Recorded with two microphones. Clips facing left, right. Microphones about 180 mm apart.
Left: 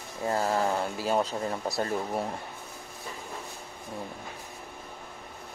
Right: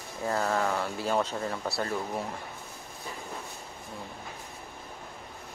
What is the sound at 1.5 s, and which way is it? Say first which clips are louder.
Speech: left 2 dB; 20° left (ahead or behind).